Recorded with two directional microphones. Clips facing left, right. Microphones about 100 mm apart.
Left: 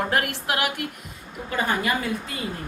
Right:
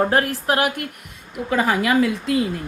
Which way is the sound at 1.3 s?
90° right.